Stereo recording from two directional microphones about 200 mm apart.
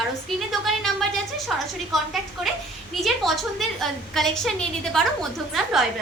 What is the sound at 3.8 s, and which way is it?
A woman's voice, centre (ahead or behind).